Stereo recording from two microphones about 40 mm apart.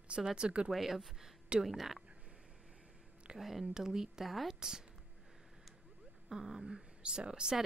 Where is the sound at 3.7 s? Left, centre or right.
Centre.